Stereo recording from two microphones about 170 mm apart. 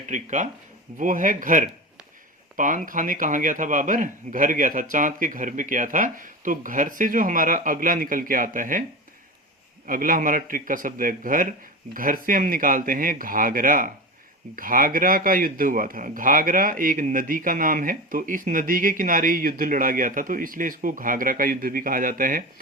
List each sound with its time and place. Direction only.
0.1 s a man's voice: 45° right (ahead or behind)
9.8 s a man's voice: 55° right (ahead or behind)